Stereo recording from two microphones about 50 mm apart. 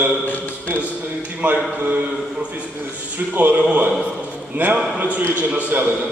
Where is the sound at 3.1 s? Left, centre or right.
Right.